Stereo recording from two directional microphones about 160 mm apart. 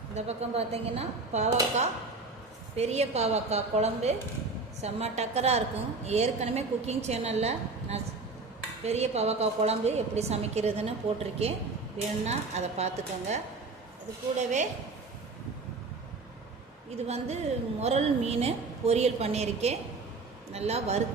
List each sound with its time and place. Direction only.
0.1 s a woman's voice: 45° right (ahead or behind)
2.7 s a woman's voice: 40° right (ahead or behind)
17.1 s a woman's voice: 40° right (ahead or behind)